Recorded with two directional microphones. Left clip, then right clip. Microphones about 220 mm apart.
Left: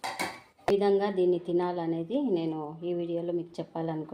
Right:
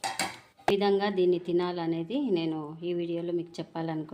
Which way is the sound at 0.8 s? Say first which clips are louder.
Even; 20° right (ahead or behind).